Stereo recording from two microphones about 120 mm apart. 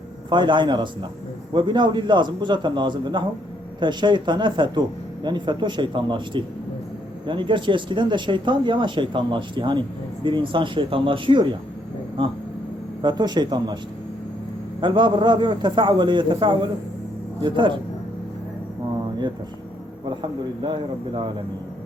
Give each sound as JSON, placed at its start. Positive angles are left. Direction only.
{"t": 0.3, "sound": "speech", "side_deg": -40}
{"t": 13.0, "sound": "speech", "side_deg": -35}
{"t": 14.8, "sound": "speech", "side_deg": -40}
{"t": 20.1, "sound": "speech", "side_deg": -40}